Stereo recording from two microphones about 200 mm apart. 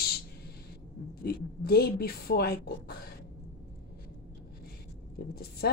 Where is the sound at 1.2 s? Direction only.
50° left (ahead or behind).